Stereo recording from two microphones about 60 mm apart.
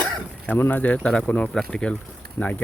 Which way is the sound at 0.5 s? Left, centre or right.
Left.